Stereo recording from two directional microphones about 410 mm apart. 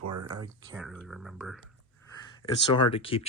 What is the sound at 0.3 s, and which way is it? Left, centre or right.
Speech, centre.